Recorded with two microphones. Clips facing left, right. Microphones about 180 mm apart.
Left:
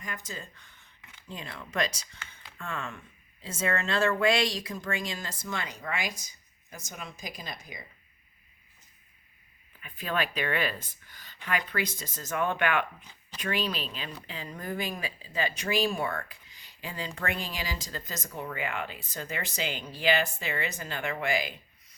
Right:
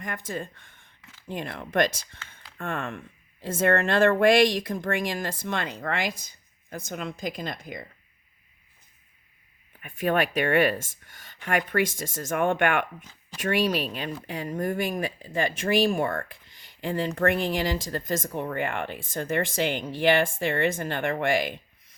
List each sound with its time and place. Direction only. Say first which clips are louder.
0.0 s speech: right 7 dB; 55° right (ahead or behind)
9.8 s speech: right 7 dB; 45° right (ahead or behind)